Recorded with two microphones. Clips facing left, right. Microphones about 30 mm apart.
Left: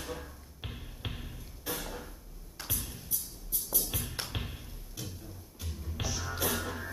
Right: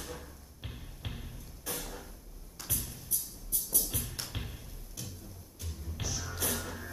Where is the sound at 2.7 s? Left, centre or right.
Centre.